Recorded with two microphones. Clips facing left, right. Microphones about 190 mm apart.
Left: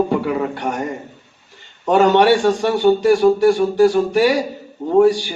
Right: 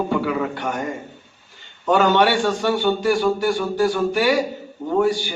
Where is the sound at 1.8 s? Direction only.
25° left (ahead or behind).